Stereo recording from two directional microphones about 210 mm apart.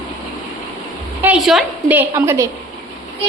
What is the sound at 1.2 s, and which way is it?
A woman's voice, 5° right (ahead or behind).